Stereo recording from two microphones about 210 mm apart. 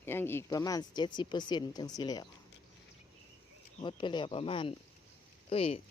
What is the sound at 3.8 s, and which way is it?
Speech, 20° left (ahead or behind).